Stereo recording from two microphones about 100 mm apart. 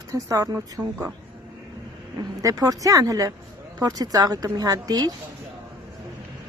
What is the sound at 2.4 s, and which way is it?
Speech, 35° right (ahead or behind).